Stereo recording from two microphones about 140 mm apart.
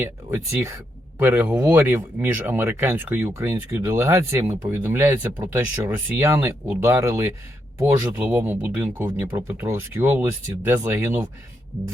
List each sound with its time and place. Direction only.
0.0 s speech: 15° right (ahead or behind)